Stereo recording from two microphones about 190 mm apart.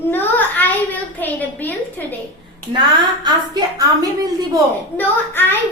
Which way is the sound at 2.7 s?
25° right (ahead or behind).